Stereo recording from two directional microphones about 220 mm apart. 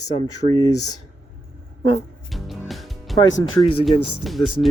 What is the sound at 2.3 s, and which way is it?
Music, centre (ahead or behind).